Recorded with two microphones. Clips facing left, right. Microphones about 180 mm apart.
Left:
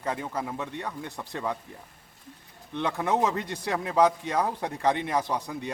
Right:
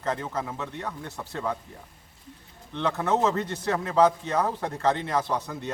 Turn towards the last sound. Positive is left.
turn(degrees=15)  # may be behind; listen again after turning